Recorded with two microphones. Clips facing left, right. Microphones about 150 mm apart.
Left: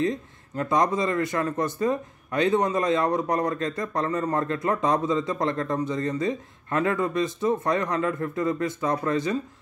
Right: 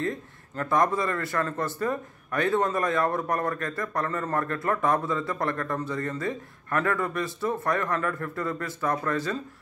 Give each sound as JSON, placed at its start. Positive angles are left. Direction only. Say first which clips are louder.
{"t": 0.0, "sound": "speech", "louder": "left 4 dB", "side_deg": 20}